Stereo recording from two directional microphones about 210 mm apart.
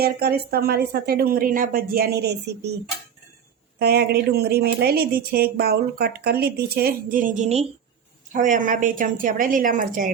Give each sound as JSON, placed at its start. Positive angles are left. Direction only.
{"t": 0.0, "sound": "speech", "side_deg": -50}
{"t": 3.8, "sound": "a woman's voice", "side_deg": -50}